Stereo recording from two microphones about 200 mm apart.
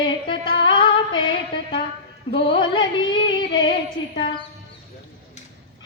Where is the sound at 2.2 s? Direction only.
25° left (ahead or behind).